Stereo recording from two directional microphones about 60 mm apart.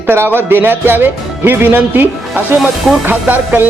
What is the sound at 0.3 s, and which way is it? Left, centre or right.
Speech, right.